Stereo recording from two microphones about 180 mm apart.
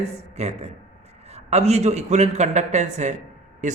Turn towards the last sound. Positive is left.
turn(degrees=-40)  # may be behind; listen again after turning